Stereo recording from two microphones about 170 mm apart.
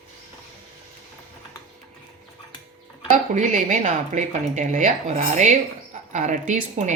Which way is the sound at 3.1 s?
50° right (ahead or behind).